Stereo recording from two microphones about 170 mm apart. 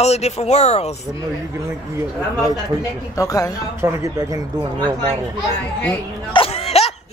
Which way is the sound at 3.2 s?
20° left (ahead or behind).